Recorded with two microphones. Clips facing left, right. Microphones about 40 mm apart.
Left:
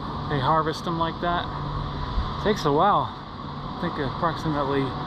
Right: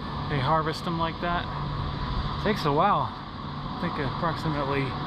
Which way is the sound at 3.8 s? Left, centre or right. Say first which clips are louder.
Left 3 dB; right.